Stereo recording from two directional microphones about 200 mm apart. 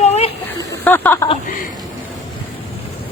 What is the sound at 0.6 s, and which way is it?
Snake, 10° left (ahead or behind).